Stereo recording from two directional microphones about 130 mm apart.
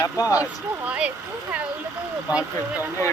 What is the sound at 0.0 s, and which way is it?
Speech, 25° left (ahead or behind).